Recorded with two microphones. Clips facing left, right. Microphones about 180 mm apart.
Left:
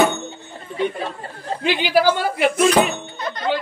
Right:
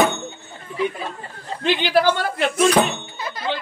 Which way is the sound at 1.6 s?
10° left (ahead or behind).